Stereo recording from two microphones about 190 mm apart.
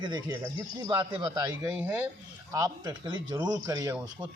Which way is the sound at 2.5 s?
20° right (ahead or behind).